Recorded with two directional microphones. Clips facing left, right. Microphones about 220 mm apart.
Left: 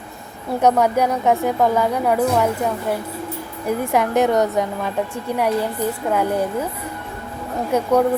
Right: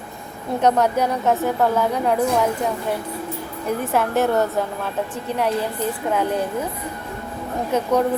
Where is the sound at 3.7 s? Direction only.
10° left (ahead or behind).